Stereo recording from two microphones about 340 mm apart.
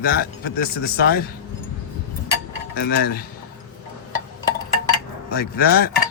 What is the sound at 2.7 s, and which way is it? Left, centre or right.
Speech, left.